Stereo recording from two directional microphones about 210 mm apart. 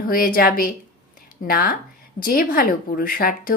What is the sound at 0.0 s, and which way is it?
A woman's voice, 45° left (ahead or behind).